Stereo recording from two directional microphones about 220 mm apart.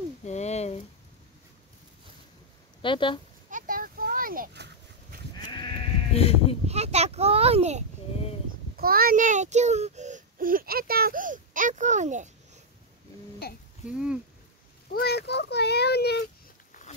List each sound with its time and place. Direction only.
0.2 s a sound: 30° left (ahead or behind)
2.8 s a woman's voice: 20° left (ahead or behind)
3.4 s a sound: 40° right (ahead or behind)
6.1 s a woman's voice: 25° left (ahead or behind)
6.7 s a child's voice: 30° right (ahead or behind)
8.7 s a child's voice: 45° right (ahead or behind)
13.4 s a child's voice: 45° left (ahead or behind)
13.8 s speech: 5° right (ahead or behind)
14.9 s a child's voice: 45° left (ahead or behind)